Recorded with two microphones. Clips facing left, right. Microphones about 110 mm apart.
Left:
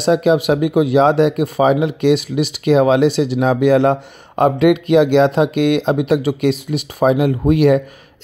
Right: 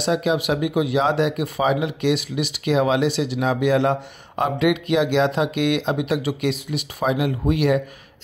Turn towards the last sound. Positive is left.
turn(degrees=45)  # may be behind; listen again after turning